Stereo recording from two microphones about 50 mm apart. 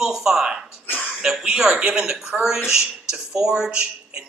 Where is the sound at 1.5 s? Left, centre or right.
Centre.